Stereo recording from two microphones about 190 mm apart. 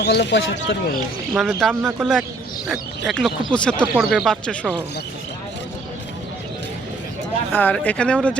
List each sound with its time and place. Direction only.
0.0 s speech: 60° left (ahead or behind)
1.3 s speech: centre (ahead or behind)
7.5 s speech: 10° left (ahead or behind)